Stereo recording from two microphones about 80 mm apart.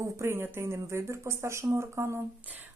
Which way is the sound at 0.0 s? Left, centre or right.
Right.